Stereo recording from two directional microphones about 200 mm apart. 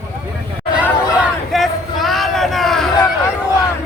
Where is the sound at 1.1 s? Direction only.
Centre (ahead or behind).